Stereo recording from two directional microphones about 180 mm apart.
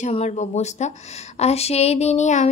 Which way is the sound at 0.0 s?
40° left (ahead or behind).